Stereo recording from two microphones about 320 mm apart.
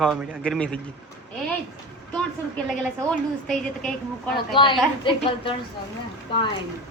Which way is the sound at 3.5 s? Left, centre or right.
Centre.